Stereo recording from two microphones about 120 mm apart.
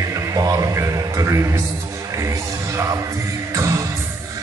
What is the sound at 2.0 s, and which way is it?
Music, 25° right (ahead or behind).